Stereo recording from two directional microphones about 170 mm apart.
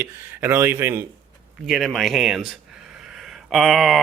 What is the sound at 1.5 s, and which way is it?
Speech, centre (ahead or behind).